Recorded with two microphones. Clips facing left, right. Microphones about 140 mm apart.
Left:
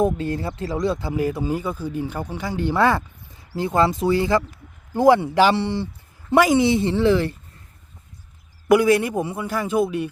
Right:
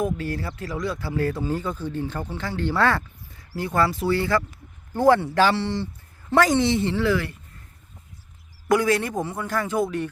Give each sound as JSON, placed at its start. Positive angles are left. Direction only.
{"t": 0.0, "sound": "speech", "side_deg": 25}
{"t": 8.7, "sound": "speech", "side_deg": 15}